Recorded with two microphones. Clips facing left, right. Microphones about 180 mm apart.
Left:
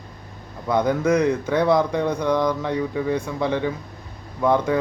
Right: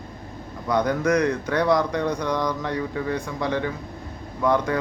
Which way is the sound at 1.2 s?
10° left (ahead or behind).